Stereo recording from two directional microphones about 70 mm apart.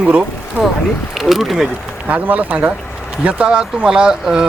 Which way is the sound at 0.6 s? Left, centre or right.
Centre.